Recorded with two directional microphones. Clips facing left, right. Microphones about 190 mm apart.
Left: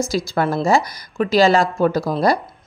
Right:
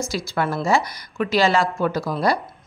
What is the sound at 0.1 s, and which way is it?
A woman's voice, 40° left (ahead or behind).